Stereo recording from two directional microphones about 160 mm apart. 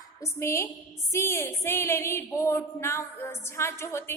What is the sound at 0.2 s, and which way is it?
Speech, 15° left (ahead or behind).